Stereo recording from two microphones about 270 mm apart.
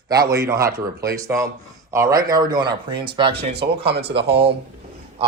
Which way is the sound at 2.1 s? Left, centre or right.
Right.